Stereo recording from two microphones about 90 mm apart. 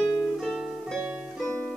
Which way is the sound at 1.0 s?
5° right (ahead or behind).